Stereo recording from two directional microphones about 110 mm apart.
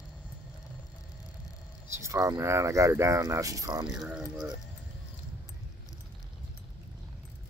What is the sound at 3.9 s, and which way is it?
Speech, 5° right (ahead or behind).